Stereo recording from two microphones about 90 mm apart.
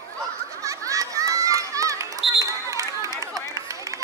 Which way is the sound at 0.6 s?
35° right (ahead or behind).